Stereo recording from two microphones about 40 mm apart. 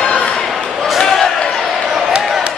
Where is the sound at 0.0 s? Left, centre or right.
Left.